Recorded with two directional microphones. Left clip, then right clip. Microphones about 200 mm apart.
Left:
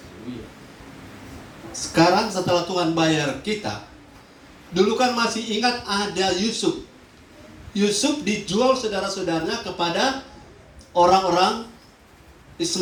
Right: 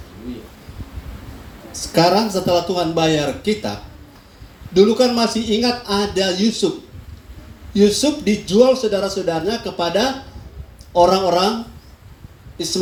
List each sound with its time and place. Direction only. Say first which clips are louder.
1.7 s a man's voice: right 3 dB; 30° right (ahead or behind)
4.7 s a man's voice: right 6 dB; 30° right (ahead or behind)
7.7 s a man's voice: right 6 dB; 30° right (ahead or behind)